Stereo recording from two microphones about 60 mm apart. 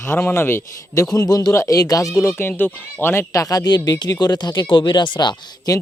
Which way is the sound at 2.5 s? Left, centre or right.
Left.